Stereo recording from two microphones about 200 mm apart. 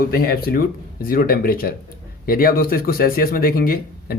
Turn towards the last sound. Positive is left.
turn(degrees=45)  # may be behind; listen again after turning